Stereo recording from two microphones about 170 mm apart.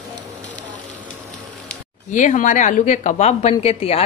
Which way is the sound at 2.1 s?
45° left (ahead or behind).